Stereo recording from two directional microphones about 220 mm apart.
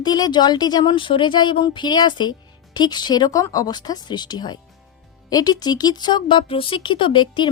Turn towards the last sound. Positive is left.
turn(degrees=20)  # may be behind; listen again after turning